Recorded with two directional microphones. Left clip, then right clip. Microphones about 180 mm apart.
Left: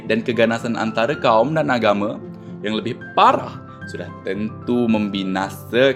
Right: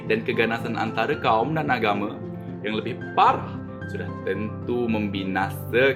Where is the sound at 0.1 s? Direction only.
50° left (ahead or behind).